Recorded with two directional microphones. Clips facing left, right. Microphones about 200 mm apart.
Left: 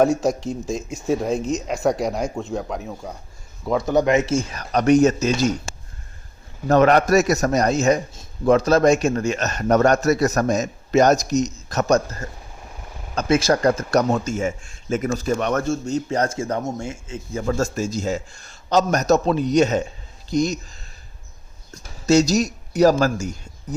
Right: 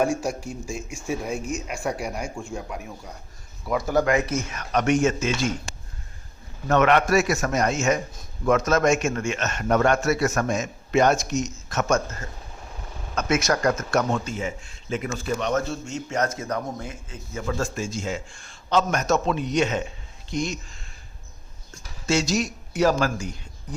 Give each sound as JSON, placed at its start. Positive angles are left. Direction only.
{"t": 0.3, "sound": "speech", "side_deg": -10}
{"t": 2.4, "sound": "speech", "side_deg": 65}
{"t": 3.8, "sound": "a man's voice", "side_deg": 20}
{"t": 6.7, "sound": "a man's voice", "side_deg": 35}
{"t": 13.1, "sound": "a man's voice", "side_deg": 30}
{"t": 16.0, "sound": "speech", "side_deg": 30}
{"t": 17.4, "sound": "a man's voice", "side_deg": 40}